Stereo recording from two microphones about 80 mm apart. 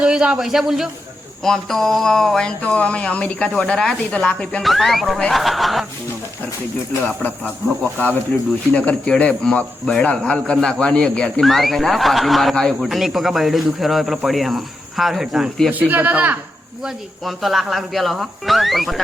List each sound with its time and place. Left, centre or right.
0.0 s speech: centre
2.6 s speech: centre
4.6 s speech: centre
7.2 s speech: left
8.7 s speech: centre
15.7 s speech: right
16.8 s speech: centre